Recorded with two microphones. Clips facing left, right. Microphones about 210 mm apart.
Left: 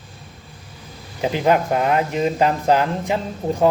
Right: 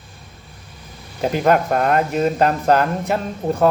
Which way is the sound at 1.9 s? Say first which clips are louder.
Right 3 dB; 15° left (ahead or behind).